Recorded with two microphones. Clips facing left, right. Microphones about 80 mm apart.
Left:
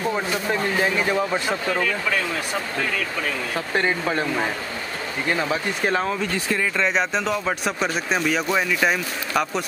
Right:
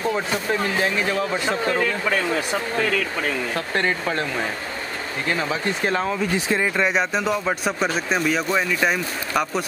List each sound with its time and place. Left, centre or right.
0.1 s speech: centre
3.5 s speech: centre
5.3 s speech: centre
6.3 s speech: right
6.9 s speech: centre